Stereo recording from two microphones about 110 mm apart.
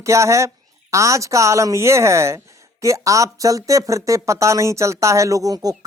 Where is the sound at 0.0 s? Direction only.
25° right (ahead or behind).